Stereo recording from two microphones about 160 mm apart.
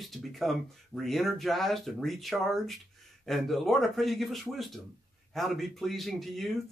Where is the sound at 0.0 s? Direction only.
Centre (ahead or behind).